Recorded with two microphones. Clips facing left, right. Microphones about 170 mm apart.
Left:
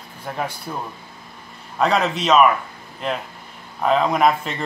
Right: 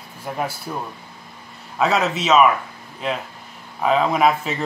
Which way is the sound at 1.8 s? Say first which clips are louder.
Even; 5° right (ahead or behind).